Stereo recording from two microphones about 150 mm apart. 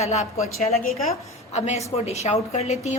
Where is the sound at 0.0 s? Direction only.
45° left (ahead or behind).